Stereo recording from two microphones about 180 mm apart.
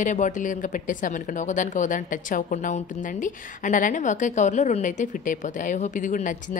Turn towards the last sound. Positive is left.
turn(degrees=45)  # may be behind; listen again after turning